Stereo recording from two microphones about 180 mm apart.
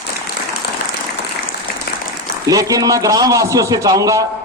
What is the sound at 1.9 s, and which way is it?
Applause, 65° left (ahead or behind).